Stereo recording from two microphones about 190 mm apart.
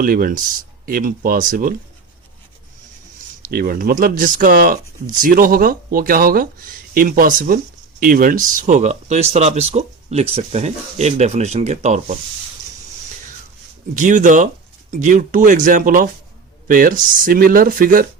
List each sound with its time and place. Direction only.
0.0 s speech: 50° right (ahead or behind)
3.4 s speech: 50° right (ahead or behind)
13.9 s speech: 40° right (ahead or behind)